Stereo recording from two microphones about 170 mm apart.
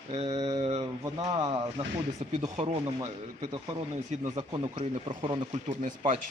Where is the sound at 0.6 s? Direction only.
40° right (ahead or behind).